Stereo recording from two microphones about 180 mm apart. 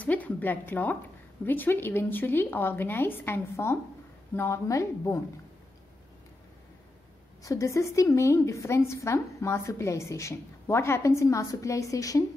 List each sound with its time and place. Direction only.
0.0 s a woman's voice: 10° left (ahead or behind)
7.4 s a woman's voice: 15° left (ahead or behind)